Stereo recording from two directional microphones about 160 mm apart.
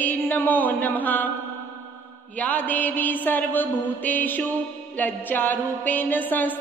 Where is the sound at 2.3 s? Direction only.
10° left (ahead or behind).